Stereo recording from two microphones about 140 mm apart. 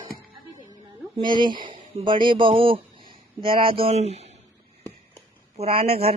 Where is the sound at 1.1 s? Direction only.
35° right (ahead or behind); by 4.3 s 50° right (ahead or behind).